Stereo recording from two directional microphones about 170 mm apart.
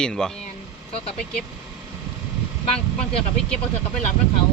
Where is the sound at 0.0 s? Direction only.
5° left (ahead or behind).